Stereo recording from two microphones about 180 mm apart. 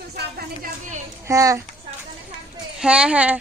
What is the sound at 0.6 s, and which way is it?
Speech, 45° right (ahead or behind).